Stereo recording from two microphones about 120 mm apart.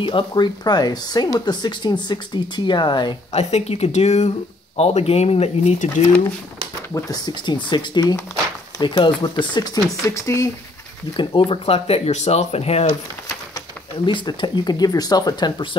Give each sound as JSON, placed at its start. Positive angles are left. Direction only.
{"t": 0.0, "sound": "speech", "side_deg": 40}
{"t": 3.3, "sound": "speech", "side_deg": 65}
{"t": 4.7, "sound": "speech", "side_deg": 60}
{"t": 6.9, "sound": "speech", "side_deg": 25}
{"t": 7.2, "sound": "speech", "side_deg": 40}
{"t": 10.0, "sound": "speech", "side_deg": 25}
{"t": 11.1, "sound": "speech", "side_deg": 45}
{"t": 14.0, "sound": "speech", "side_deg": 40}